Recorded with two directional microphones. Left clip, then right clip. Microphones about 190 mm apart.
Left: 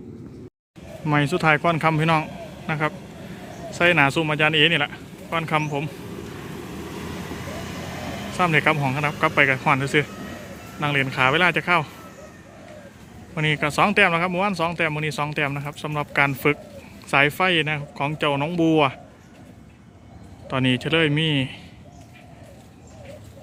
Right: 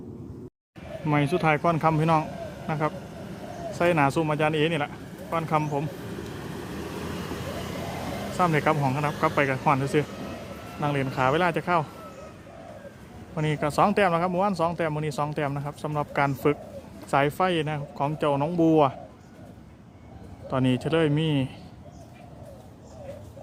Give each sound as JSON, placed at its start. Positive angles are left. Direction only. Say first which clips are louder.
{"t": 1.0, "sound": "speech", "louder": "left 4 dB", "side_deg": 0}
{"t": 8.4, "sound": "speech", "louder": "left 4 dB", "side_deg": 0}
{"t": 13.3, "sound": "speech", "louder": "left 4 dB", "side_deg": -5}
{"t": 20.5, "sound": "speech", "louder": "left 3 dB", "side_deg": -5}